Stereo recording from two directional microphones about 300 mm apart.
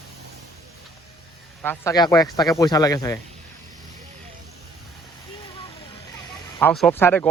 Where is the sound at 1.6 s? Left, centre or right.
Centre.